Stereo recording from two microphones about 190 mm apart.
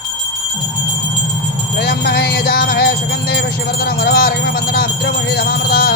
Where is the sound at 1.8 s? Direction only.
55° left (ahead or behind).